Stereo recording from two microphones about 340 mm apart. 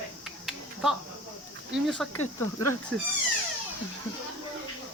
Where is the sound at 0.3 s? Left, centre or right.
Centre.